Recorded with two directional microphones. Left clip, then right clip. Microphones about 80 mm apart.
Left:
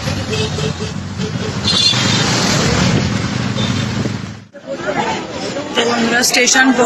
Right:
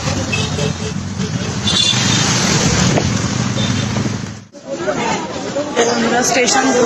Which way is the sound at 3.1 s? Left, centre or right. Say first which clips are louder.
Even; left.